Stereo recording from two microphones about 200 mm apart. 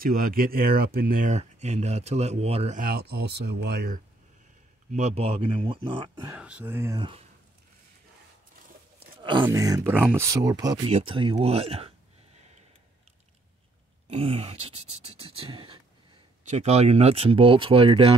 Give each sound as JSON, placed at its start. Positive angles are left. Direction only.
{"t": 0.0, "sound": "speech", "side_deg": -45}
{"t": 2.8, "sound": "speech", "side_deg": -50}
{"t": 4.9, "sound": "speech", "side_deg": -35}
{"t": 6.3, "sound": "speech", "side_deg": -5}
{"t": 7.0, "sound": "speech", "side_deg": -25}
{"t": 9.4, "sound": "speech", "side_deg": -15}
{"t": 10.9, "sound": "speech", "side_deg": -30}
{"t": 14.0, "sound": "speech", "side_deg": -30}